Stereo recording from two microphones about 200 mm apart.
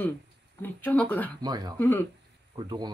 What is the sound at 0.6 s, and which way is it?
Speech, 10° left (ahead or behind).